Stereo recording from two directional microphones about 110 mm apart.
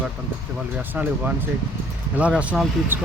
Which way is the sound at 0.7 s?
15° right (ahead or behind).